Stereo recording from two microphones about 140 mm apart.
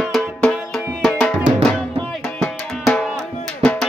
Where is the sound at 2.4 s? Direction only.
5° left (ahead or behind).